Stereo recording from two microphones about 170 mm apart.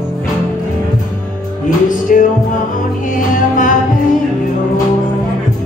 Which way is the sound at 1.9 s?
50° left (ahead or behind).